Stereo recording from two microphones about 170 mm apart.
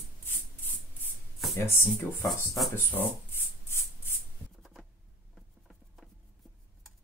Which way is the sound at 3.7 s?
15° left (ahead or behind).